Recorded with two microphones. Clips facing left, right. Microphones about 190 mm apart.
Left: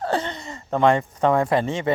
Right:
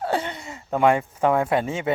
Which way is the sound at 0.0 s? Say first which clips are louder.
Left 1 dB; 10° right (ahead or behind).